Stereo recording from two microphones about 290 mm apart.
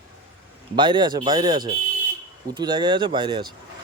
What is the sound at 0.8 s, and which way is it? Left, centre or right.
A man's voice, centre.